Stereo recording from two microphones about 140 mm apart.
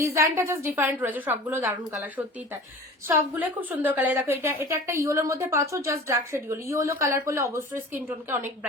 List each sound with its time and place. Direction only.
0.0 s a woman's voice: 20° right (ahead or behind)